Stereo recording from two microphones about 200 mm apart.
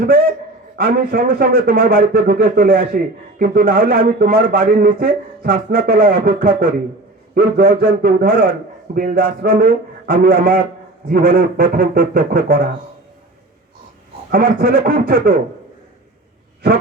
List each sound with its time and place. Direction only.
0.0 s a man's voice: 45° right (ahead or behind)
14.3 s a man's voice: 45° right (ahead or behind)